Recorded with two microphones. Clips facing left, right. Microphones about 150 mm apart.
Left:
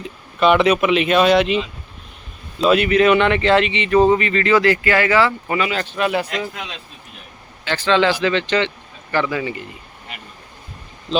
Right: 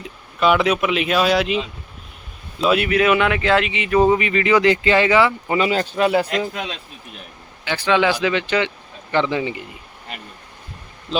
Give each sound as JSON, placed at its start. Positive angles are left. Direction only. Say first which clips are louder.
{"t": 0.0, "sound": "speech", "louder": "left 2 dB", "side_deg": 0}
{"t": 5.5, "sound": "speech", "louder": "right 4 dB", "side_deg": -30}
{"t": 7.6, "sound": "speech", "louder": "left 1 dB", "side_deg": -15}